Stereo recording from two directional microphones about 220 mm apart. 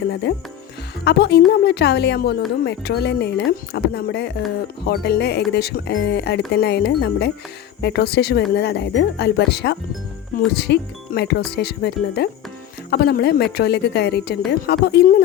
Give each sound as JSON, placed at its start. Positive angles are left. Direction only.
{"t": 0.1, "sound": "speech", "side_deg": 50}